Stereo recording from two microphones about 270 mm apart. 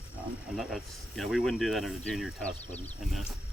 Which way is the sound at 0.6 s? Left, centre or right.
Centre.